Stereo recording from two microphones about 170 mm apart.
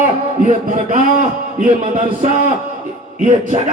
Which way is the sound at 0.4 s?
45° right (ahead or behind).